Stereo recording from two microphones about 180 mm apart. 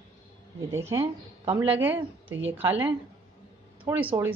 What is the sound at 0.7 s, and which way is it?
A woman's voice, 15° right (ahead or behind).